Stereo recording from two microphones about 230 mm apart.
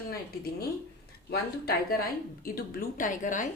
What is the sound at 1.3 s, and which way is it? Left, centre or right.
A woman's voice, left.